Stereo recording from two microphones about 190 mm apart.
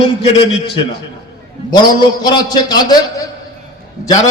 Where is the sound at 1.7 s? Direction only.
20° left (ahead or behind).